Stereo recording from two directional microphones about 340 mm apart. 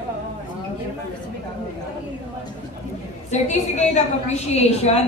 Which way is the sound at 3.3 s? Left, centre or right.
Centre.